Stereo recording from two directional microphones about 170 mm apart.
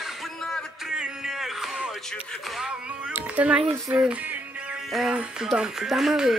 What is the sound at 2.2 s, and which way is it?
Speech, centre (ahead or behind).